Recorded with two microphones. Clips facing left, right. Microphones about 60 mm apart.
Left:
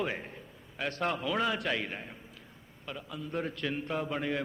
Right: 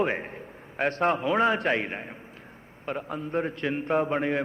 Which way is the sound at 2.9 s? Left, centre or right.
Right.